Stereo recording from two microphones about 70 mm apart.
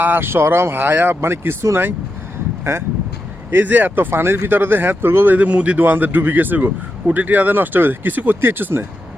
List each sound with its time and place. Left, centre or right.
0.0 s speech: right
2.7 s speech: right
3.5 s speech: right